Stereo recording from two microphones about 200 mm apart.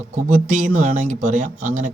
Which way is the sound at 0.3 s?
40° right (ahead or behind).